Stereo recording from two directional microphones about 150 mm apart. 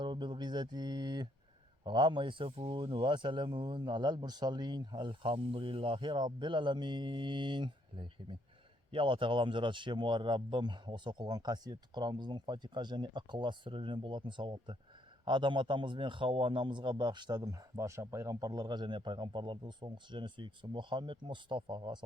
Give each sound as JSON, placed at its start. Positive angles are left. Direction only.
{"t": 0.0, "sound": "mantra", "side_deg": -30}
{"t": 1.8, "sound": "a man's voice", "side_deg": -30}